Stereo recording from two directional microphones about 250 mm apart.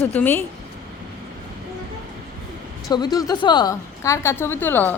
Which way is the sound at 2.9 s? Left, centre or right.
Centre.